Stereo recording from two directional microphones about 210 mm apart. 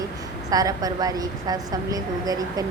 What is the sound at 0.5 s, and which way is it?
A woman's voice, 15° right (ahead or behind).